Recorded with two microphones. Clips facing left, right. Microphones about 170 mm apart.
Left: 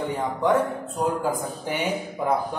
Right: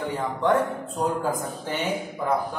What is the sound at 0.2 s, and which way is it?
Speech, 10° left (ahead or behind).